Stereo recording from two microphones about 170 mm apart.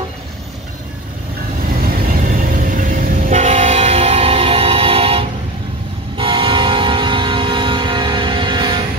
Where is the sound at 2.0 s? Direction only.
55° right (ahead or behind); by 8.8 s 25° right (ahead or behind).